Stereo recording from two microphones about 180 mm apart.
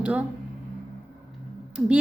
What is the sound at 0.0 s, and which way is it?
Speech, 5° right (ahead or behind).